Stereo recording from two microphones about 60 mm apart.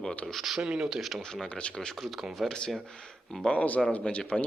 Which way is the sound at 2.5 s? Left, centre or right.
Centre.